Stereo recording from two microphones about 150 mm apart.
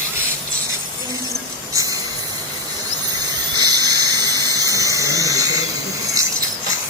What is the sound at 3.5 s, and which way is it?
Dental drill, 25° right (ahead or behind).